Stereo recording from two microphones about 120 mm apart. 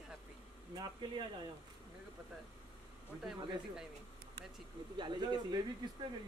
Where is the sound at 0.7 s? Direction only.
40° right (ahead or behind).